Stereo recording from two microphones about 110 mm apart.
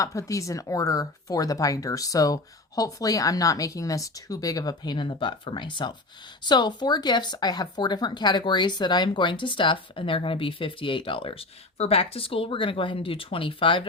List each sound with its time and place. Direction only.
0.0 s speech: 30° left (ahead or behind); by 13.8 s 50° left (ahead or behind)